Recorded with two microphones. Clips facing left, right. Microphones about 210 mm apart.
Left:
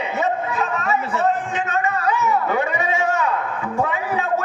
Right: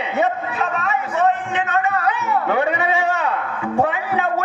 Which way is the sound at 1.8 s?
60° right (ahead or behind).